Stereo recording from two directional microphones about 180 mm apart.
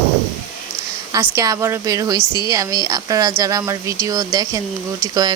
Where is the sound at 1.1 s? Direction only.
15° right (ahead or behind).